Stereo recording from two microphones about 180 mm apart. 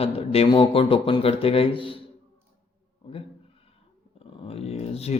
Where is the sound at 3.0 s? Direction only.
25° left (ahead or behind).